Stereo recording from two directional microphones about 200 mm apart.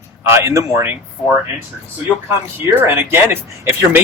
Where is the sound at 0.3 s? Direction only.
15° right (ahead or behind).